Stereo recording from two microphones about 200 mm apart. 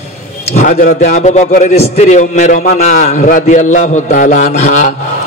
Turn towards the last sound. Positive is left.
turn(degrees=35)  # may be behind; listen again after turning